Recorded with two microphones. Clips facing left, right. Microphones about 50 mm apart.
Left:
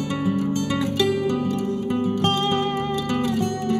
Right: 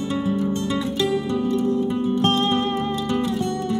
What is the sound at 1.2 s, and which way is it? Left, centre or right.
Music, left.